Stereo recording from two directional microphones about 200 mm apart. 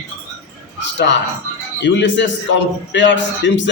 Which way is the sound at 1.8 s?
65° left (ahead or behind).